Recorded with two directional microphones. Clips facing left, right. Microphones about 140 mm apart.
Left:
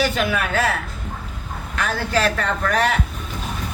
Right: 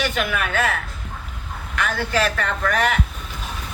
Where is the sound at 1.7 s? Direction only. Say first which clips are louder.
Left 1 dB; 35° left (ahead or behind).